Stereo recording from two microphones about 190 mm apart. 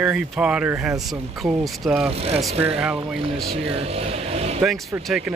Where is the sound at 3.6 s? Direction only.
30° right (ahead or behind).